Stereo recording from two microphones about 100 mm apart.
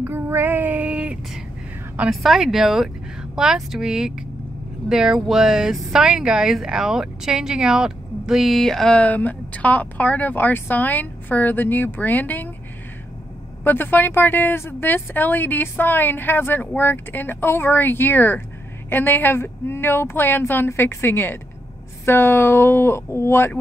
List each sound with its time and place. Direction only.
0.0 s female singing: 20° right (ahead or behind)
2.0 s speech: centre (ahead or behind); by 12.4 s 20° left (ahead or behind)
13.7 s a woman's voice: 20° left (ahead or behind)